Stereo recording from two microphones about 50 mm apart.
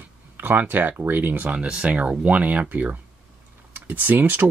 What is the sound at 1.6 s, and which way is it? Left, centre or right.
Speech, right.